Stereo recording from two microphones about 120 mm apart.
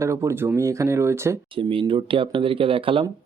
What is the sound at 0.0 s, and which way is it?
Speech, 25° right (ahead or behind).